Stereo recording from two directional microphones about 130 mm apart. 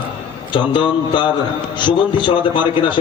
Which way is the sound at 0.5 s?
40° left (ahead or behind).